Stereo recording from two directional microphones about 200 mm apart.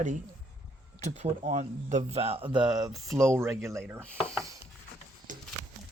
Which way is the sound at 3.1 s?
15° right (ahead or behind).